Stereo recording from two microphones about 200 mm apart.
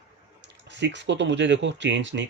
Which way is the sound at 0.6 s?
60° right (ahead or behind).